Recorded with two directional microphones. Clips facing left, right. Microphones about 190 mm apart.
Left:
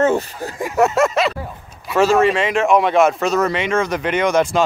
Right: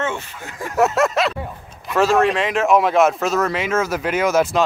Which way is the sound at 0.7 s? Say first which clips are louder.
Left 1 dB; centre (ahead or behind).